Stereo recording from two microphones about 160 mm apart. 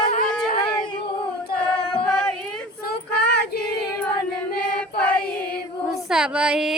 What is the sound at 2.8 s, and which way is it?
Child singing, 80° left.